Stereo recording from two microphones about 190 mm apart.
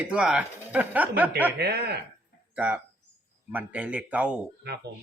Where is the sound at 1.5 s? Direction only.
55° right (ahead or behind).